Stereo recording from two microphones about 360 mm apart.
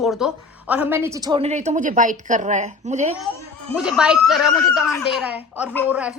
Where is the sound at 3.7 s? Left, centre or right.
Centre.